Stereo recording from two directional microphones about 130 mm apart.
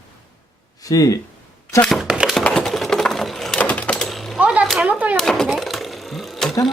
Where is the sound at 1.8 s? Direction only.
Centre (ahead or behind).